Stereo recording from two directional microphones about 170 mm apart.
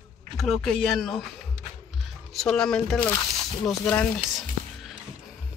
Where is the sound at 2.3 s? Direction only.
Centre (ahead or behind).